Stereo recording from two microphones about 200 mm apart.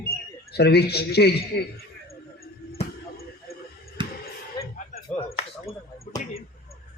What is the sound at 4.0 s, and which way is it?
Basketball bounce, 25° right (ahead or behind).